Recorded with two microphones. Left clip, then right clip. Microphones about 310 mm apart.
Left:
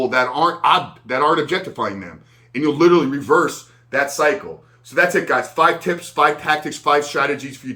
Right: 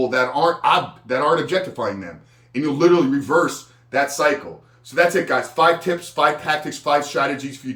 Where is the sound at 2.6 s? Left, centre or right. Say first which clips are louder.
Left 2 dB; centre.